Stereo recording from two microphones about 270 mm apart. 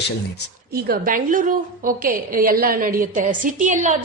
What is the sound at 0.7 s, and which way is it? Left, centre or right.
A woman's voice, right.